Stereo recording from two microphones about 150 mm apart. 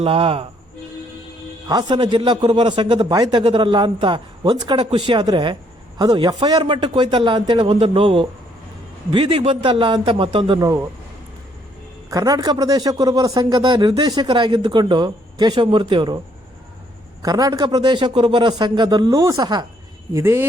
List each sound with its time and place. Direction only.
0.0 s a man's voice: 40° right (ahead or behind)
1.6 s a man's voice: 30° right (ahead or behind)
10.6 s a man's voice: 20° right (ahead or behind)
12.1 s a man's voice: 25° right (ahead or behind)
17.2 s a man's voice: 25° right (ahead or behind)